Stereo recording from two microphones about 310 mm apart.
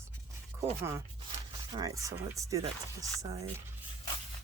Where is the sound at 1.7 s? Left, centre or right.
Centre.